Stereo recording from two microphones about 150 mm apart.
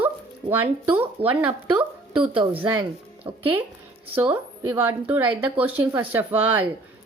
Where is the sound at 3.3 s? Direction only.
25° right (ahead or behind).